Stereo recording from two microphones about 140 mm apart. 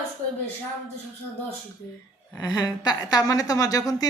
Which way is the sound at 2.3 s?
30° left (ahead or behind).